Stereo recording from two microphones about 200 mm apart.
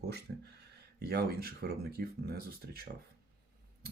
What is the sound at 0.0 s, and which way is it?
Speech, 55° right (ahead or behind).